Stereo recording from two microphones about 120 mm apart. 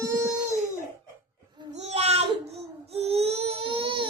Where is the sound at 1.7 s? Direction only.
60° right (ahead or behind).